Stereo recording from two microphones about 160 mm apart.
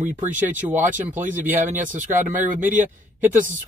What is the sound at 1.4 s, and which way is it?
Speech, 10° right (ahead or behind).